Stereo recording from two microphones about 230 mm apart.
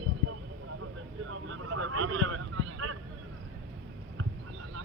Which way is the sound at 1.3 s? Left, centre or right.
Right.